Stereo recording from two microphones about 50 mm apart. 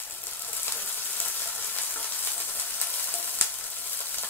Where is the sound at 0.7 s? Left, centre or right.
Left.